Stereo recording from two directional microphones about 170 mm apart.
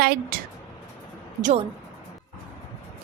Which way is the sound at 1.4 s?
50° right (ahead or behind).